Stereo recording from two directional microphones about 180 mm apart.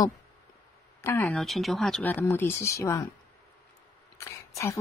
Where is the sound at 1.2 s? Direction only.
Centre (ahead or behind); by 3.1 s 15° left (ahead or behind).